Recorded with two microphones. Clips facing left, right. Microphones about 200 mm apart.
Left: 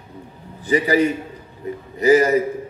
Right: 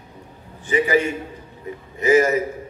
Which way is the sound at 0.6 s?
35° left (ahead or behind).